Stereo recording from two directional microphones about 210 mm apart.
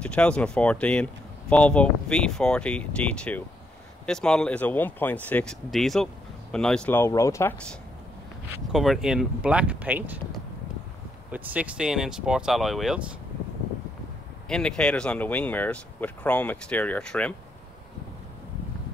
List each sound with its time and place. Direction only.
0.0 s speech: 5° left (ahead or behind)
8.5 s speech: centre (ahead or behind)
14.5 s speech: 5° left (ahead or behind)